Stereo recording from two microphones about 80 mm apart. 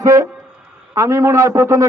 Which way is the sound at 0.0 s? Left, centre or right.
Right.